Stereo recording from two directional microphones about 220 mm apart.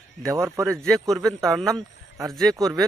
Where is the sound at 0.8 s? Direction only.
5° left (ahead or behind).